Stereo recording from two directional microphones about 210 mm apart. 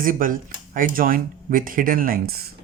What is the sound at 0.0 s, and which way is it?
Speech, 40° right (ahead or behind).